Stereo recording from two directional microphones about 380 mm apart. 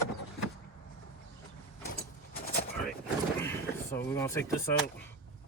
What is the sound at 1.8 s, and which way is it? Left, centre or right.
Vehicle, left.